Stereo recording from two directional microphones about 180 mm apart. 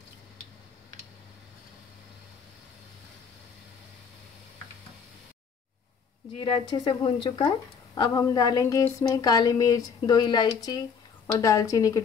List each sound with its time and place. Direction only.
6.3 s speech: 25° left (ahead or behind)